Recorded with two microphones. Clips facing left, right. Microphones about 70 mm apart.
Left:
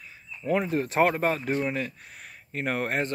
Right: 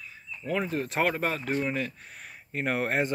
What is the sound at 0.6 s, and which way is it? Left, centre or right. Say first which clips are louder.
Speech: left 4 dB; centre.